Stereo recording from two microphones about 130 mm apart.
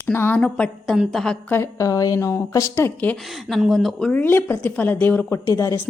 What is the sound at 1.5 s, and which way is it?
Speech, 20° left (ahead or behind).